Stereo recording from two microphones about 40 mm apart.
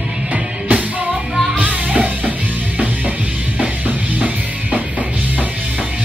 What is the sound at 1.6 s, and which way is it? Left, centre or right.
Music, right.